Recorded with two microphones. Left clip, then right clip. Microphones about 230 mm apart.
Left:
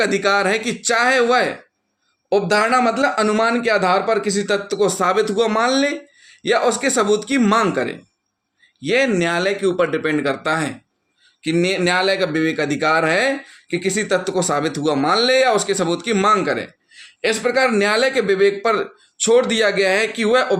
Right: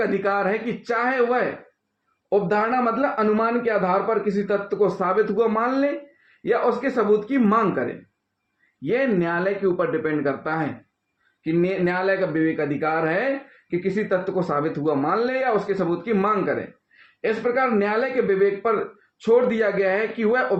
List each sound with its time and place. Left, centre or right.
0.0 s a man's voice: left